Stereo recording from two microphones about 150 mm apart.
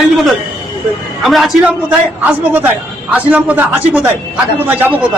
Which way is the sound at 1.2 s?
Centre (ahead or behind).